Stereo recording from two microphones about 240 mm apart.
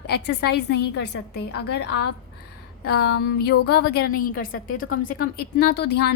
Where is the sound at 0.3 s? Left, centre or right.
Left.